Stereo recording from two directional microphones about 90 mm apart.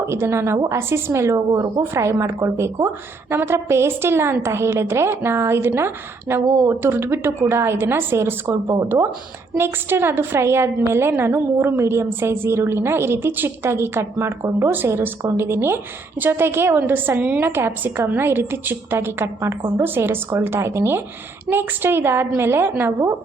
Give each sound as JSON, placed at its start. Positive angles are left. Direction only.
{"t": 0.0, "sound": "a woman's voice", "side_deg": -30}
{"t": 9.6, "sound": "a woman's voice", "side_deg": -25}